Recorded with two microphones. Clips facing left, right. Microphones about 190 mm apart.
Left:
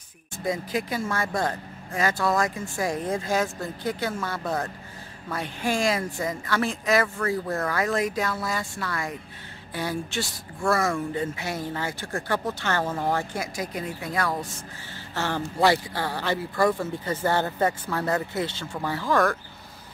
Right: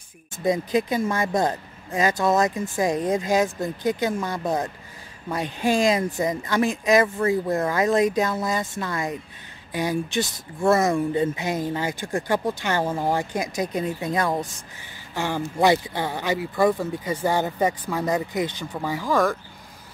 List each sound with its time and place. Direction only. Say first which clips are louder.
0.4 s speech: right 6 dB; 20° right (ahead or behind)